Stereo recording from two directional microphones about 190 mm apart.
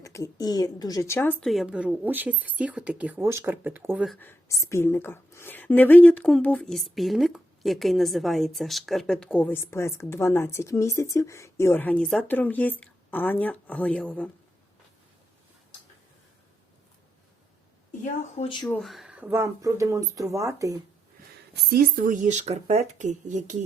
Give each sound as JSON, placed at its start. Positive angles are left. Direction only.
{"t": 0.0, "sound": "speech", "side_deg": 15}
{"t": 4.2, "sound": "a woman's voice", "side_deg": 15}
{"t": 18.3, "sound": "speech", "side_deg": 25}
{"t": 18.7, "sound": "speech", "side_deg": 0}
{"t": 21.7, "sound": "speech", "side_deg": -50}